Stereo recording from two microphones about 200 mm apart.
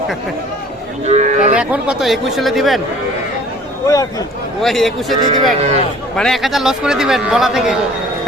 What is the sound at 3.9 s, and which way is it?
Speech, 15° left (ahead or behind).